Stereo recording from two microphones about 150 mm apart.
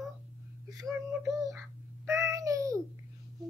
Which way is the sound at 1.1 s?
15° right (ahead or behind).